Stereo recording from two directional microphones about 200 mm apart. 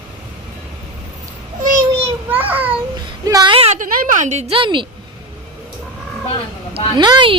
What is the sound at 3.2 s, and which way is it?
Speech, 20° right (ahead or behind).